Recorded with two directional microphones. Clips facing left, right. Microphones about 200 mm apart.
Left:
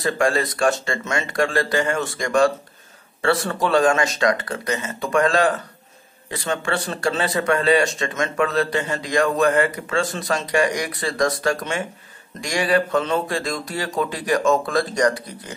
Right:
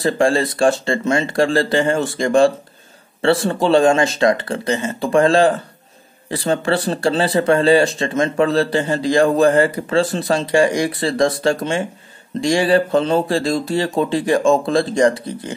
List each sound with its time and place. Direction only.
0.0 s speech: 30° right (ahead or behind)